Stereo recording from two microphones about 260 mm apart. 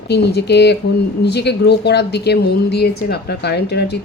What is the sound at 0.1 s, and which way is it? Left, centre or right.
Speech, left.